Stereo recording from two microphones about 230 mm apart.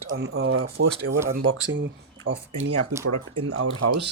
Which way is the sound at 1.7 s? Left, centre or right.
Right.